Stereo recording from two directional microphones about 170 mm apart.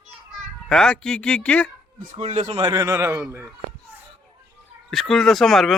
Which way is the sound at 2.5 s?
25° right (ahead or behind).